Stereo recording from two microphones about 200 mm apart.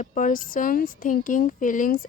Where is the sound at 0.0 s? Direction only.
40° left (ahead or behind).